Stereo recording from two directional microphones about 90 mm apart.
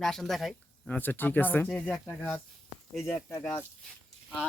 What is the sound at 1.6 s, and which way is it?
Speech, 10° left (ahead or behind).